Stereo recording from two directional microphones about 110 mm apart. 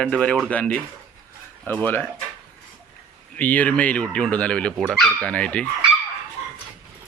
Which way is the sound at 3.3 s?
15° left (ahead or behind).